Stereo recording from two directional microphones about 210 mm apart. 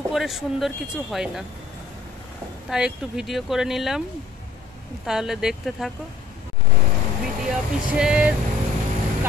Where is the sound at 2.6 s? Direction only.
5° right (ahead or behind).